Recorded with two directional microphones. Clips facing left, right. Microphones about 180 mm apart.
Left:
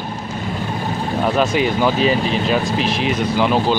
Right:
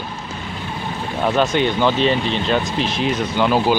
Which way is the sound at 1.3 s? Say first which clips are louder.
Right 1 dB; 5° left (ahead or behind).